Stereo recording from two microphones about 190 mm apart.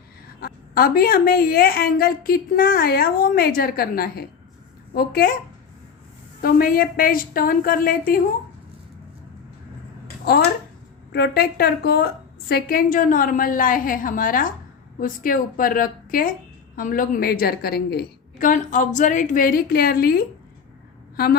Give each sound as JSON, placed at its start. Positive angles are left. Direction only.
{"t": 0.3, "sound": "a woman's voice", "side_deg": 50}
{"t": 6.4, "sound": "a woman's voice", "side_deg": 50}
{"t": 11.1, "sound": "a woman's voice", "side_deg": 55}